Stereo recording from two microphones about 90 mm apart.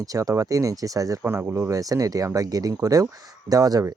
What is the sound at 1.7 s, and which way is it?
Speech, 40° right (ahead or behind).